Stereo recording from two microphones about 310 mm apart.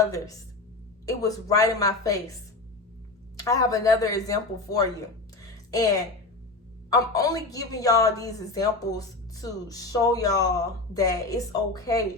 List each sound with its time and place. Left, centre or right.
1.0 s a woman's voice: centre
3.3 s a woman's voice: centre
5.4 s a sound: centre
6.9 s a woman's voice: centre